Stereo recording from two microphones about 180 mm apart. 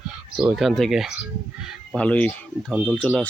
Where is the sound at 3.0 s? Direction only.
5° left (ahead or behind).